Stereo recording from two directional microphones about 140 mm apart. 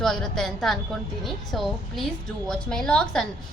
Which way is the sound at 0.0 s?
5° left (ahead or behind).